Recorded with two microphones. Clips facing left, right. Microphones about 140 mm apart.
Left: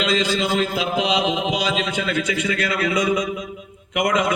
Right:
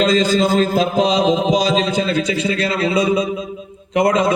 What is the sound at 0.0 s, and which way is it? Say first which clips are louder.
A man's voice: right 6 dB; 40° right (ahead or behind).